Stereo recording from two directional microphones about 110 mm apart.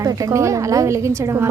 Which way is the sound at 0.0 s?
30° right (ahead or behind).